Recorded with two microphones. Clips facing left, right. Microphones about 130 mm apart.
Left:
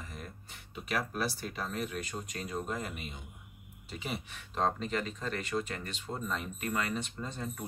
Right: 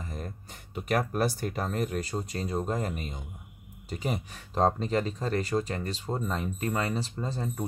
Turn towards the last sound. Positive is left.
turn(degrees=-30)  # may be behind; listen again after turning